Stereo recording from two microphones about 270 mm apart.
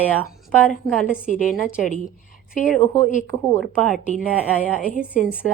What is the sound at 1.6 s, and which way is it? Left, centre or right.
Speech, centre.